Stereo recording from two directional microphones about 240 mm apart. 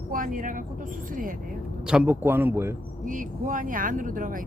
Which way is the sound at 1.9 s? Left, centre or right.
Centre.